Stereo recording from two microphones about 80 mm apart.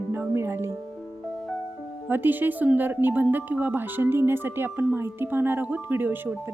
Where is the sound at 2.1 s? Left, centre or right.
Right.